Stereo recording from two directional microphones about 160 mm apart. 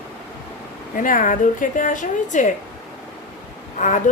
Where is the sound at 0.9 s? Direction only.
55° left (ahead or behind).